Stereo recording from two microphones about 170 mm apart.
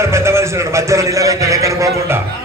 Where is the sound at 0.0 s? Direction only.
15° right (ahead or behind).